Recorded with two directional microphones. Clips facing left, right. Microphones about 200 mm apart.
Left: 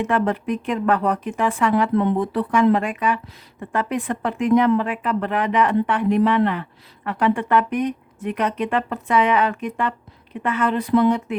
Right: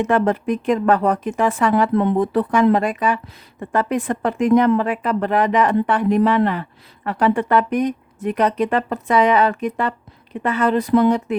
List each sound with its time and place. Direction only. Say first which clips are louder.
0.0 s speech: right 3 dB; 40° right (ahead or behind)